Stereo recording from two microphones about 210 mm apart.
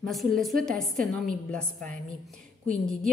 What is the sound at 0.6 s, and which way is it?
Speech, centre (ahead or behind).